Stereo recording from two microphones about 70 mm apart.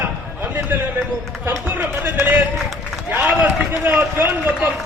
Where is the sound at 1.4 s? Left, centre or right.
Right.